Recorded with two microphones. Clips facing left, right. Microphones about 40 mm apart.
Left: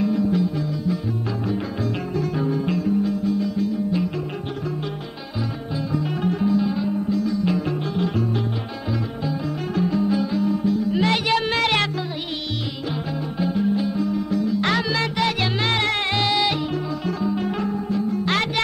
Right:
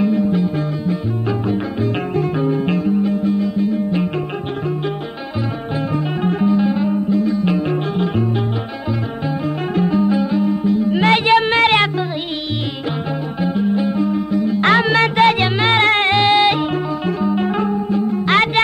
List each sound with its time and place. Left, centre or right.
0.0 s music: right
6.2 s music: right
9.8 s music: right
13.4 s music: right